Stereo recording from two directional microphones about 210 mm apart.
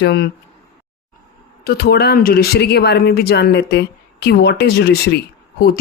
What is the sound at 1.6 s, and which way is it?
Speech, 50° left (ahead or behind).